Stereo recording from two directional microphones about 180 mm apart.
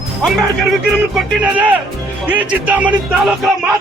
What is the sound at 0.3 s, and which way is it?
Speech, centre (ahead or behind).